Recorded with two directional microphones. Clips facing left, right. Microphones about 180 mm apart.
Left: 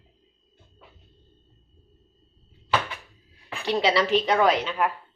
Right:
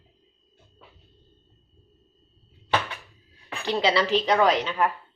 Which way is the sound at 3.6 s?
10° left (ahead or behind).